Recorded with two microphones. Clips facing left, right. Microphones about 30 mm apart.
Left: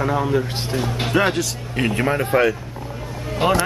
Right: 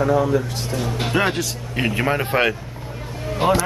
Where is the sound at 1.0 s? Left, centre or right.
Centre.